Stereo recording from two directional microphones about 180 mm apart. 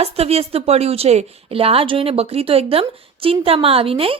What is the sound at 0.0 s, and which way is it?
Speech, 35° right (ahead or behind).